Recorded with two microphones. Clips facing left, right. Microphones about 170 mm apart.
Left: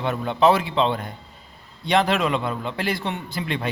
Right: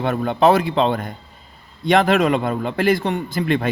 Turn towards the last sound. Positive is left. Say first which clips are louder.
# right 7 dB
turn(degrees=-50)  # may be behind; listen again after turning